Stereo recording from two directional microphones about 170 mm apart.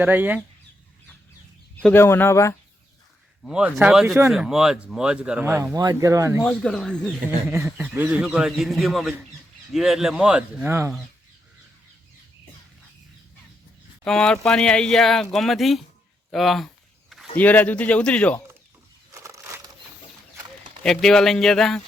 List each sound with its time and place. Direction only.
0.0 s speech: 10° right (ahead or behind)
1.8 s speech: 10° left (ahead or behind)
3.4 s speech: 5° right (ahead or behind)
6.4 s speech: 5° left (ahead or behind)
7.3 s speech: 10° right (ahead or behind)
14.0 s speech: 5° left (ahead or behind)
19.1 s a sound: 15° right (ahead or behind)
20.8 s speech: 5° left (ahead or behind)